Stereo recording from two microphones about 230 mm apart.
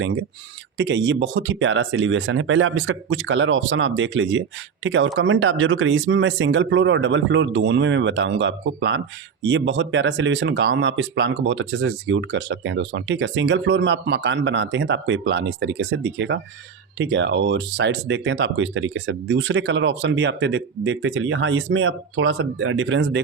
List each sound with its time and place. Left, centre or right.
0.8 s speech: right